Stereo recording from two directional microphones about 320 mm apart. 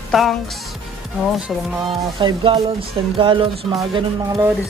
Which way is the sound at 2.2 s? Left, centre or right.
Centre.